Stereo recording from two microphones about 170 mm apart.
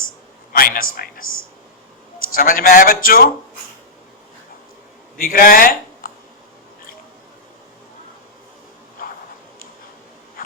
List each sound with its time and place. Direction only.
0.5 s a man's voice: 60° left (ahead or behind)
2.3 s a man's voice: 55° left (ahead or behind)
5.1 s speech: 55° left (ahead or behind)